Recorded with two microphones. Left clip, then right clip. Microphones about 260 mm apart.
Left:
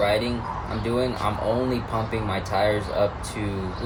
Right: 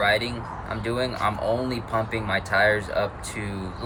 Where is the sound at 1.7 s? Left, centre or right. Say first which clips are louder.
Even; centre.